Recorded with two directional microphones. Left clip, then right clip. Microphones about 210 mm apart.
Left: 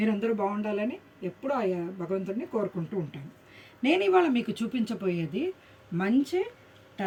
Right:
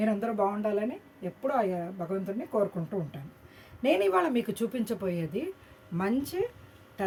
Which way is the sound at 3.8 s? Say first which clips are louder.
Left 2 dB; 20° right (ahead or behind).